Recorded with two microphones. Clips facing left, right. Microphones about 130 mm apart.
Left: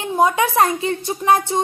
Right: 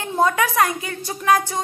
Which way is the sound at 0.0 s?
15° left (ahead or behind).